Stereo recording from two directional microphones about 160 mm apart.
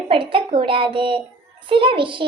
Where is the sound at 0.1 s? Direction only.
35° right (ahead or behind).